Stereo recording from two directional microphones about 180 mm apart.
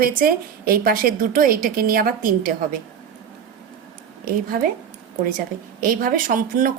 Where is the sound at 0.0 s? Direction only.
55° right (ahead or behind).